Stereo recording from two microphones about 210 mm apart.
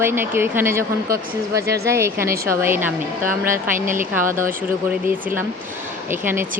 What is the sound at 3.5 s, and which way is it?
Speech, 40° right (ahead or behind).